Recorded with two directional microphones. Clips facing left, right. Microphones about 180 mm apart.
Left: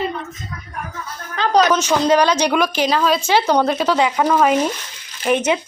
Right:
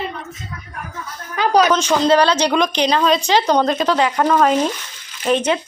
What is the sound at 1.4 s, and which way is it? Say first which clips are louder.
Speech: right 1 dB; 10° right (ahead or behind).